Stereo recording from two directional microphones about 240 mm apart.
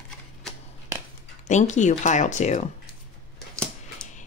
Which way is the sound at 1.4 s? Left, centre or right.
Left.